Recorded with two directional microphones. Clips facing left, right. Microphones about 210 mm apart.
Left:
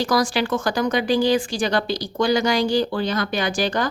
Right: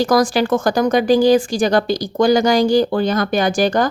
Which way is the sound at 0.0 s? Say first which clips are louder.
Right 6 dB; 45° right (ahead or behind).